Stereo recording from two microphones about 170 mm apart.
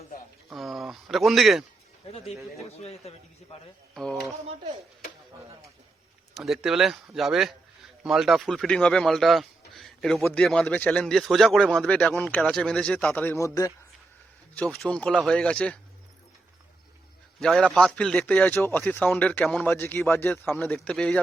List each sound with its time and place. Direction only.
0.5 s speech: centre (ahead or behind)
2.0 s a man's voice: 35° left (ahead or behind)
3.9 s speech: centre (ahead or behind)
6.3 s speech: centre (ahead or behind); by 13.7 s 20° left (ahead or behind)
14.5 s a man's voice: 5° left (ahead or behind)
17.4 s a man's voice: 5° left (ahead or behind)